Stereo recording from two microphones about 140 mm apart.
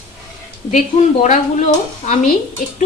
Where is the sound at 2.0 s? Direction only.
55° left (ahead or behind).